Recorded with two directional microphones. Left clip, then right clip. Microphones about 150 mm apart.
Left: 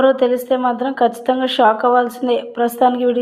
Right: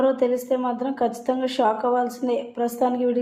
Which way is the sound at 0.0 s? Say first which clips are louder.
Left 7 dB; 25° left (ahead or behind).